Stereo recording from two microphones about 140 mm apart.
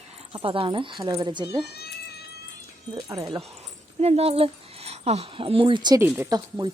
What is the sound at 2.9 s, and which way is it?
Speech, 25° right (ahead or behind).